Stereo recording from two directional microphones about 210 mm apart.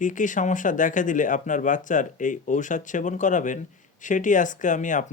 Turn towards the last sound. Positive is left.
turn(degrees=35)  # may be behind; listen again after turning